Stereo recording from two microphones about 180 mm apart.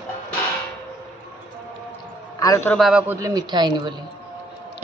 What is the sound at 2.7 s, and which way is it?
Speech, centre (ahead or behind).